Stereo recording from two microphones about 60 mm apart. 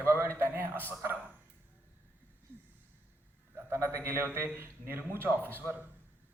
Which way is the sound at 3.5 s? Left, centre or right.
Right.